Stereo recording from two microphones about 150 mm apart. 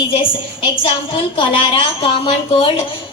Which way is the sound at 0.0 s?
35° left (ahead or behind).